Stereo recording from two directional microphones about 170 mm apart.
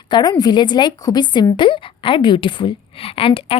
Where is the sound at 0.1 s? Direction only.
25° left (ahead or behind).